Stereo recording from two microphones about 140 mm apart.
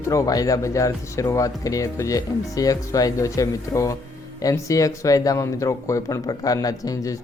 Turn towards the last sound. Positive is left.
turn(degrees=25)  # may be behind; listen again after turning